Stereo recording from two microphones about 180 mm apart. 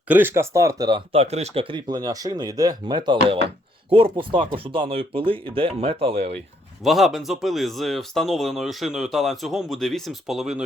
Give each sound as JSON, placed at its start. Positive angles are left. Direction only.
{"t": 0.1, "sound": "speech", "side_deg": -10}
{"t": 1.1, "sound": "speech", "side_deg": -35}
{"t": 6.8, "sound": "speech", "side_deg": 0}